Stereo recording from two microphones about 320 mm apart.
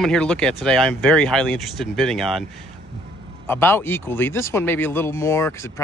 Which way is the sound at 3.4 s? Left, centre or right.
Centre.